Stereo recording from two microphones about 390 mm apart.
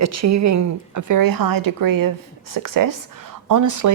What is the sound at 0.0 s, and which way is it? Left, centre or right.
Speech, right.